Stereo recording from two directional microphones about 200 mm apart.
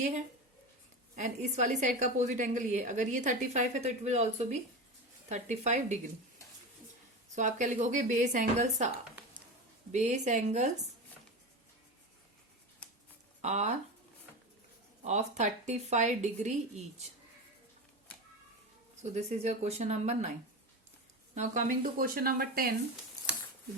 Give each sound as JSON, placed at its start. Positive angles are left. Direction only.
{"t": 1.1, "sound": "a woman's voice", "side_deg": -35}
{"t": 7.3, "sound": "a woman's voice", "side_deg": -35}
{"t": 9.9, "sound": "a woman's voice", "side_deg": -35}
{"t": 13.4, "sound": "a woman's voice", "side_deg": -35}
{"t": 15.0, "sound": "a woman's voice", "side_deg": -35}
{"t": 19.1, "sound": "a woman's voice", "side_deg": -35}
{"t": 21.3, "sound": "speech", "side_deg": -35}